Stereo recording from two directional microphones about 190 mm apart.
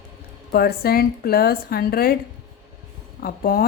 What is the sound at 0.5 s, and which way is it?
Speech, 55° left (ahead or behind).